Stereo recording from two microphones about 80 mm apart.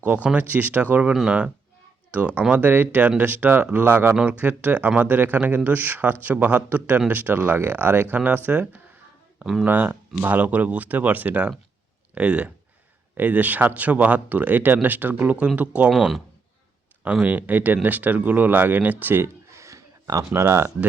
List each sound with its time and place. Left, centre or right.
0.0 s speech: centre
9.4 s speech: centre
9.6 s speech: right
15.9 s speech: centre
17.0 s speech: centre; by 20.4 s right
20.4 s speech: right